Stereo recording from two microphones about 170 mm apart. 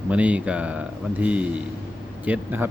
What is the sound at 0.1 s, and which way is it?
Speech, 10° right (ahead or behind).